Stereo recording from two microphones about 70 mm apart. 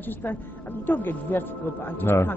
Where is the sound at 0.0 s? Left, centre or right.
Left.